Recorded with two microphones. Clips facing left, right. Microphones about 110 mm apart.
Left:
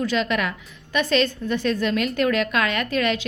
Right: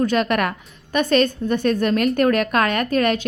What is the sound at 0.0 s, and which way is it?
A woman's voice, 50° right (ahead or behind).